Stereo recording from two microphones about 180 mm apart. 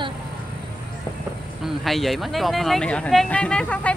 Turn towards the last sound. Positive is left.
turn(degrees=5)  # may be behind; listen again after turning